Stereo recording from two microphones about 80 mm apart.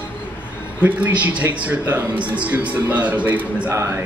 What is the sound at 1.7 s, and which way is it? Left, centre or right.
A man's voice, centre.